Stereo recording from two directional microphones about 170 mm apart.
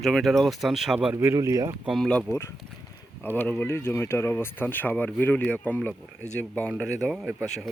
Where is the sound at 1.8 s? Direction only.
Centre (ahead or behind).